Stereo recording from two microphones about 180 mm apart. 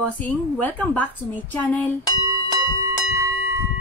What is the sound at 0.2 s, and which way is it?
A woman's voice, 10° left (ahead or behind).